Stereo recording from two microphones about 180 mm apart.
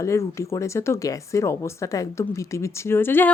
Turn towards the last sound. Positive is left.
turn(degrees=10)  # may be behind; listen again after turning